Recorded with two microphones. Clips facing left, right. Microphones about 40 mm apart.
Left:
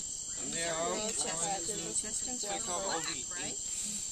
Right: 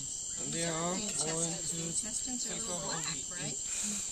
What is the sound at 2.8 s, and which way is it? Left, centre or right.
Speech, centre.